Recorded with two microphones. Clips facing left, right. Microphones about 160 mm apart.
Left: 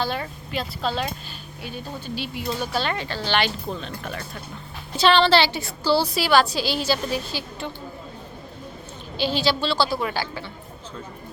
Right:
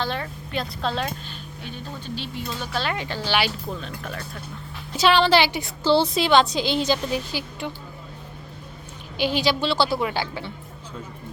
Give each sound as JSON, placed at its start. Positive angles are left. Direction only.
{"t": 0.0, "sound": "speech", "side_deg": 10}
{"t": 2.8, "sound": "speech", "side_deg": -10}
{"t": 4.9, "sound": "a woman's voice", "side_deg": -10}
{"t": 9.1, "sound": "a woman's voice", "side_deg": -15}